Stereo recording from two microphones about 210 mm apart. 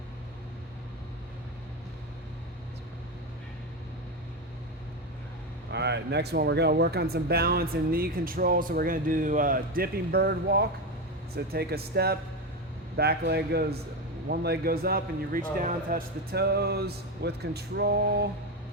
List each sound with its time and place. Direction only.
5.7 s speech: 55° right (ahead or behind)